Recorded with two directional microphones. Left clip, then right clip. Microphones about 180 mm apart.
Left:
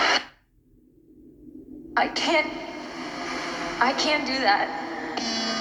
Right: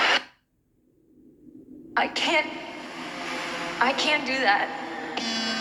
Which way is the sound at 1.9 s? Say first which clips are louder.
Left 1 dB; 25° right (ahead or behind).